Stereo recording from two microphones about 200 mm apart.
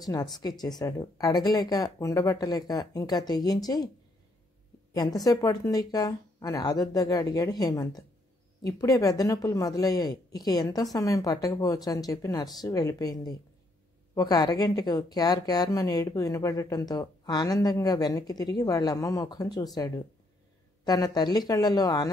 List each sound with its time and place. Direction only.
0.0 s speech: 20° left (ahead or behind)
4.9 s a woman's voice: 20° left (ahead or behind)